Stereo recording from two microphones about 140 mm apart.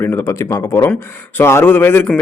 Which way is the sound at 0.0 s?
20° left (ahead or behind).